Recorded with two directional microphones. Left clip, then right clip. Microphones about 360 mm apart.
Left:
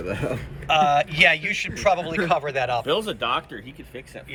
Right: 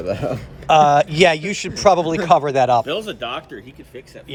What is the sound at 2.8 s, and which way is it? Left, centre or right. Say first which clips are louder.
Speech: left 1 dB; centre.